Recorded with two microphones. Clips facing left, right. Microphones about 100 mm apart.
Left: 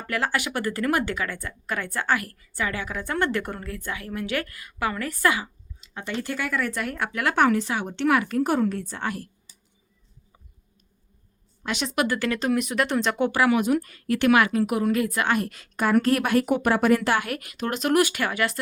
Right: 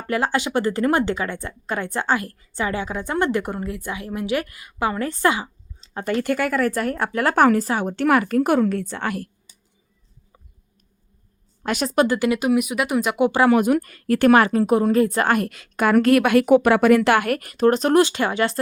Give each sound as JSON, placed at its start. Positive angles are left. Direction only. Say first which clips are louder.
{"t": 0.1, "sound": "speech", "louder": "right 5 dB", "side_deg": -20}
{"t": 5.9, "sound": "speech", "louder": "right 8 dB", "side_deg": -45}
{"t": 6.1, "sound": "speech", "louder": "right 6 dB", "side_deg": -55}
{"t": 11.6, "sound": "speech", "louder": "right 5 dB", "side_deg": -45}
{"t": 11.9, "sound": "speech", "louder": "right 6 dB", "side_deg": -20}
{"t": 13.5, "sound": "speech", "louder": "right 4 dB", "side_deg": -50}
{"t": 15.3, "sound": "a woman's voice", "louder": "right 4 dB", "side_deg": -60}